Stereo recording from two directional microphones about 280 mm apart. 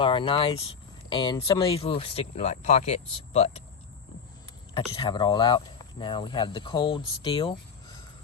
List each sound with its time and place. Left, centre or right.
0.0 s speech: centre
4.7 s speech: centre